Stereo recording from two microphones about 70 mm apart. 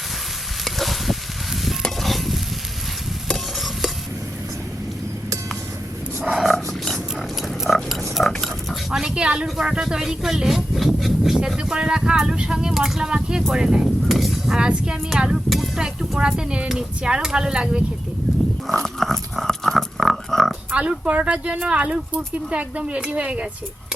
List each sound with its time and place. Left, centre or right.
0.6 s sizzle: centre
1.8 s stir: centre
6.3 s a sound: centre
7.4 s pig: centre
8.9 s speech: centre
18.3 s a sound: centre
18.7 s dog: centre
20.7 s speech: centre